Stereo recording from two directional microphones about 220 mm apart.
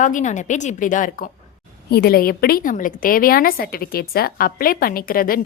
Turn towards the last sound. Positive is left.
turn(degrees=40)  # may be behind; listen again after turning